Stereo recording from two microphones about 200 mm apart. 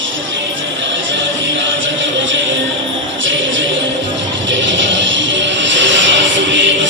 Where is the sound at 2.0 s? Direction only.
70° right (ahead or behind).